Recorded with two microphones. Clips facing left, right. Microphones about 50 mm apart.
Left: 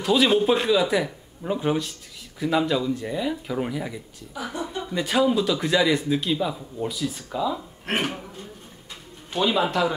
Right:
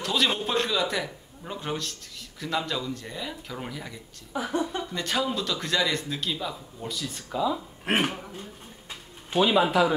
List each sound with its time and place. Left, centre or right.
0.0 s speech: centre
4.3 s a woman's voice: right
4.8 s speech: centre